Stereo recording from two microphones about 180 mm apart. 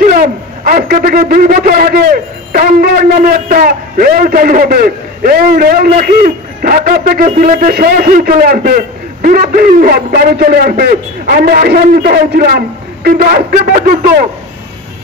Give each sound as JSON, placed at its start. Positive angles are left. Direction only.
{"t": 0.0, "sound": "a man's voice", "side_deg": -50}